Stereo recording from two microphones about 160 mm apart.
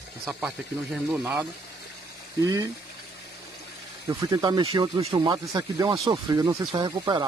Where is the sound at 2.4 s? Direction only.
20° right (ahead or behind).